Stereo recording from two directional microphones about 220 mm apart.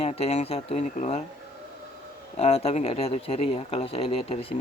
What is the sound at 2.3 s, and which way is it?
A man's voice, 25° left (ahead or behind).